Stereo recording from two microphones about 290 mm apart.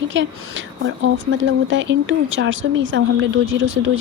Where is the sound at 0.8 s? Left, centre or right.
Right.